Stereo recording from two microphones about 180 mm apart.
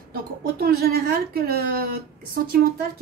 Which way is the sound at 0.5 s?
60° right (ahead or behind).